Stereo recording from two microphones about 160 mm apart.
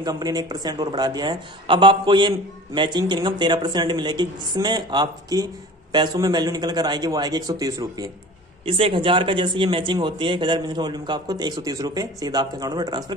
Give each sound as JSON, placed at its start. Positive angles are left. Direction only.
{"t": 0.0, "sound": "speech", "side_deg": -25}
{"t": 8.6, "sound": "speech", "side_deg": -35}